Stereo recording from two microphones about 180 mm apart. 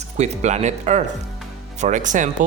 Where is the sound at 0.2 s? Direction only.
40° right (ahead or behind).